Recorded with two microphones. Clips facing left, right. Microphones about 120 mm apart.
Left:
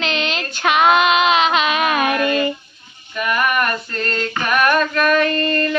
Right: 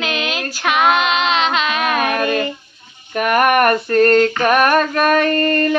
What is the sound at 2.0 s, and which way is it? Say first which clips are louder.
Child singing: even; 50° right (ahead or behind).